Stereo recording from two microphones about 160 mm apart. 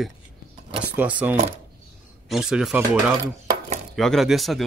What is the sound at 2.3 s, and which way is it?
Speech, 5° right (ahead or behind).